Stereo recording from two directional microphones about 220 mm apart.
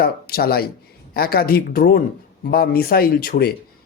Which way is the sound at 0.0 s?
45° left (ahead or behind).